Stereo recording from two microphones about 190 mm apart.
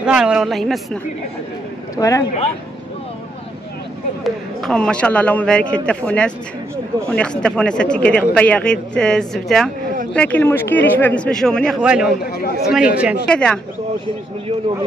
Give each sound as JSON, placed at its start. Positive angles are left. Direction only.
{"t": 0.0, "sound": "speech", "side_deg": -5}
{"t": 2.0, "sound": "a man's voice", "side_deg": 15}
{"t": 4.2, "sound": "a man's voice", "side_deg": 0}
{"t": 13.3, "sound": "speech", "side_deg": 5}